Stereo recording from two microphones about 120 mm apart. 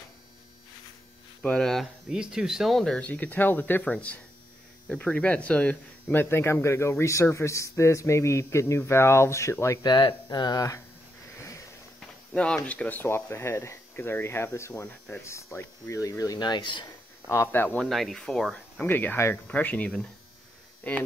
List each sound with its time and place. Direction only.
1.4 s speech: 5° left (ahead or behind); by 9.8 s 25° left (ahead or behind)
9.8 s speech: 35° left (ahead or behind)
11.3 s sniff: 25° left (ahead or behind)
12.4 s speech: 10° left (ahead or behind); by 16.8 s 40° left (ahead or behind)
17.3 s speech: 20° left (ahead or behind)
17.8 s speech: centre (ahead or behind)
18.9 s speech: 15° left (ahead or behind)